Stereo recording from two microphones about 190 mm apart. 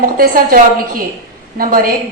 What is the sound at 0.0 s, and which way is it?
A woman's voice, 50° right (ahead or behind).